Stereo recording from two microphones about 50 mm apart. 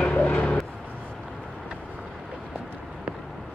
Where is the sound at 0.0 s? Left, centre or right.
Left.